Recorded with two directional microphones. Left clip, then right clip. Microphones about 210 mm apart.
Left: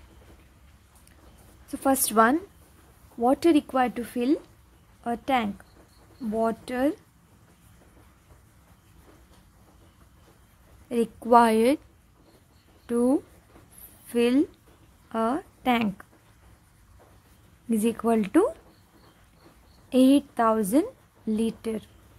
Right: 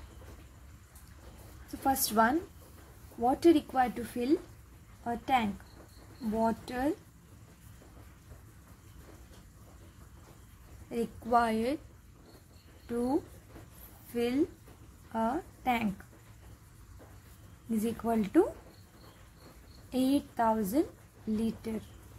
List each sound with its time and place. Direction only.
1.7 s a woman's voice: 45° left (ahead or behind)
10.9 s a woman's voice: 45° left (ahead or behind)
12.9 s a woman's voice: 45° left (ahead or behind)
14.1 s a woman's voice: 45° left (ahead or behind)
17.6 s a woman's voice: 45° left (ahead or behind)
19.9 s a woman's voice: 40° left (ahead or behind)